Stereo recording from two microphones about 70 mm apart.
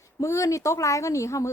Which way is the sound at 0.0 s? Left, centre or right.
Left.